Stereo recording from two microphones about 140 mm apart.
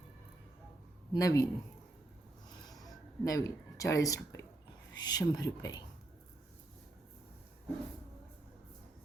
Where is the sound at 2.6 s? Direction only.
25° left (ahead or behind).